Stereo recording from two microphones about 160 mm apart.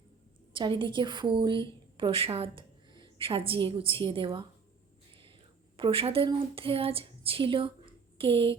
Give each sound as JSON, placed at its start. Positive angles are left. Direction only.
{"t": 0.5, "sound": "a woman's voice", "side_deg": -30}
{"t": 5.7, "sound": "speech", "side_deg": -35}